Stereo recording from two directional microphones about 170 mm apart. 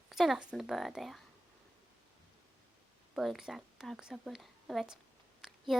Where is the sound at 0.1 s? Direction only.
Centre (ahead or behind).